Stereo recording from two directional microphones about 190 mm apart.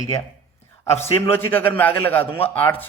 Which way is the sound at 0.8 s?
15° left (ahead or behind).